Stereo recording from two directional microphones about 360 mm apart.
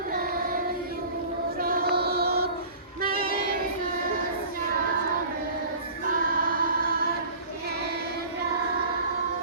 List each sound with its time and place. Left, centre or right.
0.1 s child singing: right
1.5 s music: right
6.1 s choir: right